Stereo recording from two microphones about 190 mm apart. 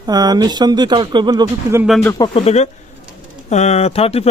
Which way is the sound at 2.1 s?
20° left (ahead or behind).